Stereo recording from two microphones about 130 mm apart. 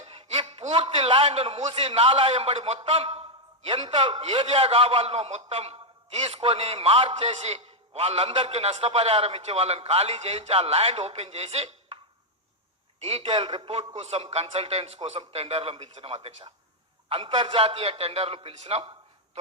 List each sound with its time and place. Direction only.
0.0 s chuckle: 55° right (ahead or behind)
0.9 s a man's voice: 45° right (ahead or behind)
13.0 s a man's voice: 50° right (ahead or behind)
18.8 s a sound: 45° right (ahead or behind)